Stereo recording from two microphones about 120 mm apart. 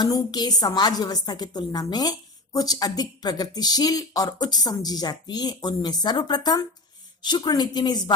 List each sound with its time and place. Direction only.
0.0 s a woman's voice: 35° left (ahead or behind)